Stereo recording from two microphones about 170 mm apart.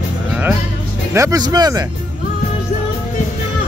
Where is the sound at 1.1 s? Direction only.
20° right (ahead or behind).